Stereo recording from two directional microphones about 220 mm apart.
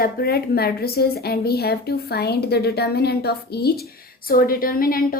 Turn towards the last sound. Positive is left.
turn(degrees=40)  # may be behind; listen again after turning